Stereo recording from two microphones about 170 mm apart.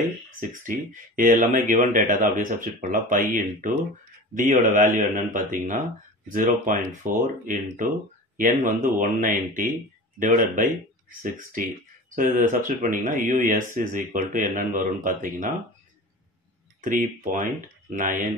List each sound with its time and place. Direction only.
0.4 s speech: 50° right (ahead or behind)
12.2 s speech: 50° right (ahead or behind)
16.8 s speech: 50° right (ahead or behind)